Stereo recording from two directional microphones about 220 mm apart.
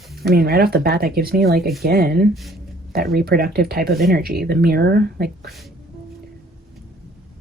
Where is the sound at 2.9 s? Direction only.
45° right (ahead or behind).